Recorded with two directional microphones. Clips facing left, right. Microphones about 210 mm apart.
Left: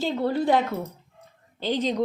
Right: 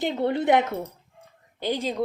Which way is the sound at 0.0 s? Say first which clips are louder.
Even; 20° right (ahead or behind).